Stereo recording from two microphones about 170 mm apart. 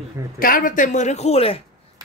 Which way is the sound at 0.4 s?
55° left (ahead or behind).